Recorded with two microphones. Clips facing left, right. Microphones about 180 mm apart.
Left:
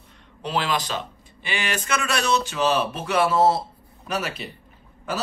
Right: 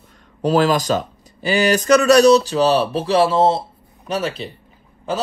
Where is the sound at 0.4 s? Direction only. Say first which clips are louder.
Right 9 dB; 40° right (ahead or behind).